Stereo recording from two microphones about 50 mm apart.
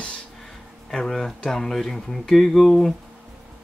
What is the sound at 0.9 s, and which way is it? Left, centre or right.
Speech, centre.